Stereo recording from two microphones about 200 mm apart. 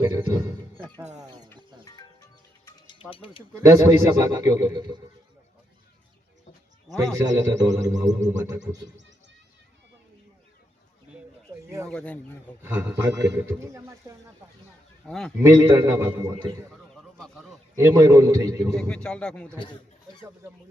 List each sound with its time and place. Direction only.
0.2 s speech: 20° right (ahead or behind)
1.2 s speech: 20° right (ahead or behind)
1.8 s music: 20° left (ahead or behind)
3.1 s speech: 25° left (ahead or behind)
3.5 s speech: 15° right (ahead or behind)
6.8 s speech: 15° right (ahead or behind)
11.9 s speech: 5° left (ahead or behind)
12.6 s speech: 10° right (ahead or behind)
15.0 s a man's voice: centre (ahead or behind)
15.4 s speech: 15° right (ahead or behind)
16.9 s a sound: 5° left (ahead or behind)
17.7 s speech: 15° right (ahead or behind)
18.7 s speech: 5° left (ahead or behind)